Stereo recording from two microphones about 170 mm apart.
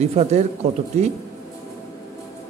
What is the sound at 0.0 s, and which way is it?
Speech, 40° right (ahead or behind).